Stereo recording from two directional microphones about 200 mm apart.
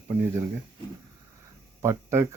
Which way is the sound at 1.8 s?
10° right (ahead or behind).